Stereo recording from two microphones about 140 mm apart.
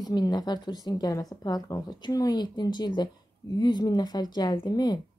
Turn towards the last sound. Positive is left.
turn(degrees=30)  # may be behind; listen again after turning